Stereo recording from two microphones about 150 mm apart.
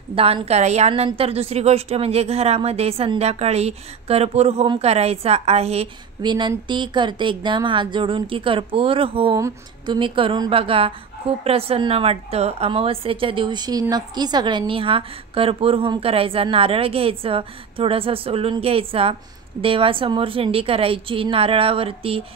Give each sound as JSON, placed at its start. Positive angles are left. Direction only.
{"t": 0.1, "sound": "a woman's voice", "side_deg": -40}
{"t": 6.2, "sound": "a woman's voice", "side_deg": -30}